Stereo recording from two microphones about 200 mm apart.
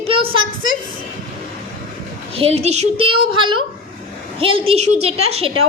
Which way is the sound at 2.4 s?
30° right (ahead or behind).